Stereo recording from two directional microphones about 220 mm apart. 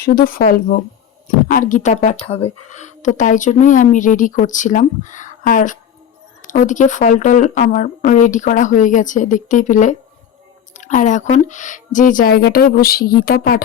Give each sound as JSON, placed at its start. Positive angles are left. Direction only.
{"t": 0.0, "sound": "a woman's voice", "side_deg": 40}